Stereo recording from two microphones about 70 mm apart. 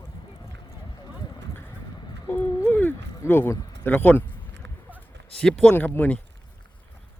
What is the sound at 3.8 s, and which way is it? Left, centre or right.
Speech, left.